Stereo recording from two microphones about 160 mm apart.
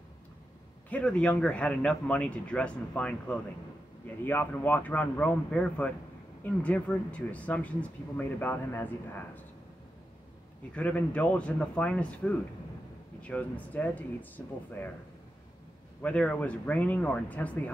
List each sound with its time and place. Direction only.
0.8 s speech: 5° left (ahead or behind)
10.7 s speech: 10° left (ahead or behind)
16.0 s speech: 10° left (ahead or behind)